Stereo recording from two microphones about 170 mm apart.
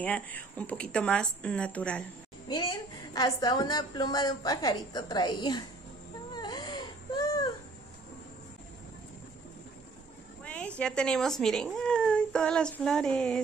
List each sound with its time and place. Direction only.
0.0 s speech: 10° left (ahead or behind)
2.4 s a woman's voice: 25° left (ahead or behind)
6.3 s baby cry: 20° left (ahead or behind)
10.4 s a sound: 5° left (ahead or behind)
10.8 s speech: 5° left (ahead or behind)